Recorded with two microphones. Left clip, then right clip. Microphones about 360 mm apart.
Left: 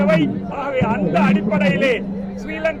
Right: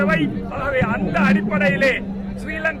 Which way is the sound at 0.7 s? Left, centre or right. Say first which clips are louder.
Left 3 dB; right.